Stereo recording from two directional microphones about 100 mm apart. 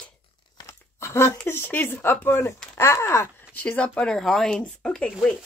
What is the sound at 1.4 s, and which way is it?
Speech, 20° left (ahead or behind).